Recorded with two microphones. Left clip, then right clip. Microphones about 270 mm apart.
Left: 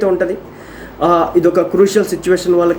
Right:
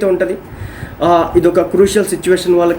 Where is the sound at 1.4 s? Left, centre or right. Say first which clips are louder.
Right 1 dB; centre.